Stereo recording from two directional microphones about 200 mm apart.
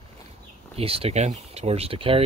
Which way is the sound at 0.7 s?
30° right (ahead or behind).